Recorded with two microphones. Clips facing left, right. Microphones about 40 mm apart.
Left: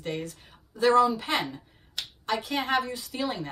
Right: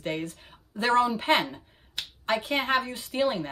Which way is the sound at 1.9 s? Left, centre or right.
Right.